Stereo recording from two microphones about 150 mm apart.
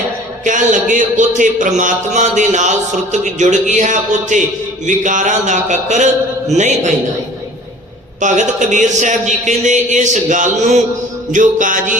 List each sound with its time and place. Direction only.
0.4 s a man's voice: 55° right (ahead or behind)
8.2 s a man's voice: 55° right (ahead or behind)